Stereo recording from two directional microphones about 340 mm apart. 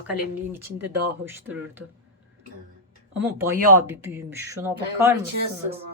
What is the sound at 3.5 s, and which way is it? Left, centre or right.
Speech, right.